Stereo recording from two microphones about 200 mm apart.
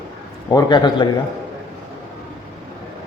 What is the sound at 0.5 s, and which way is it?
Speech, 20° left (ahead or behind).